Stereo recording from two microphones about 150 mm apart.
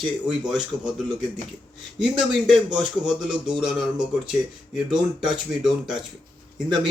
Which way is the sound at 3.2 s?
5° right (ahead or behind).